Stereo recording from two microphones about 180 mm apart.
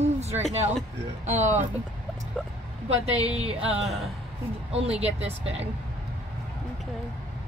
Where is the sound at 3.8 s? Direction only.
Centre (ahead or behind).